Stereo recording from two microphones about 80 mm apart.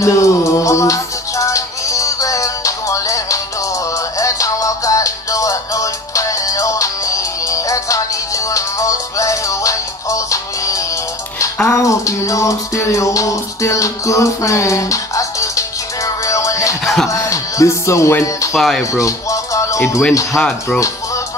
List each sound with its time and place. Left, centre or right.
0.0 s music: left
16.8 s music: centre
17.1 s music: left
18.5 s speech: centre
18.9 s music: left
20.3 s speech: centre